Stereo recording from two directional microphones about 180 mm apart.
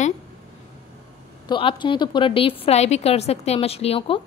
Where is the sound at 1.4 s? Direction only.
25° left (ahead or behind).